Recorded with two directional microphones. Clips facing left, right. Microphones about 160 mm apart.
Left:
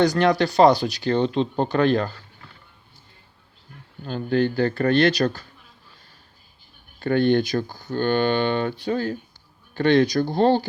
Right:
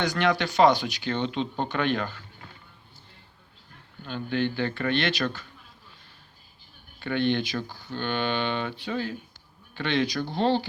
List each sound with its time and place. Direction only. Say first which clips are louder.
0.0 s speech: left 7 dB; 35° left (ahead or behind)
4.0 s speech: left 6 dB; 40° left (ahead or behind)
7.0 s speech: left 7 dB; 40° left (ahead or behind)